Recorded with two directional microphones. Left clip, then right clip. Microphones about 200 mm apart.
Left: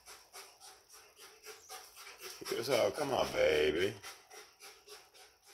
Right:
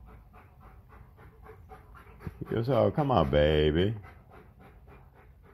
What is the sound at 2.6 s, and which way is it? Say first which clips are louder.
Speech: right 6 dB; 15° left (ahead or behind).